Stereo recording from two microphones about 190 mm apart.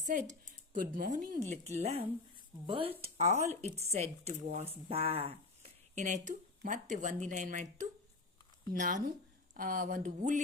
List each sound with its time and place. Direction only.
0.4 s speech: 45° right (ahead or behind)
1.5 s speech: 35° right (ahead or behind)
4.9 s a sound: 30° right (ahead or behind)
6.2 s speech: 40° right (ahead or behind)